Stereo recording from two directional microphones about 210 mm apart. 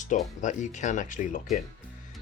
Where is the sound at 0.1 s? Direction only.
35° left (ahead or behind).